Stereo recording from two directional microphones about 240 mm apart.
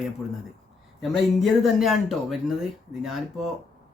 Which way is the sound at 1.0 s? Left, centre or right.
Centre.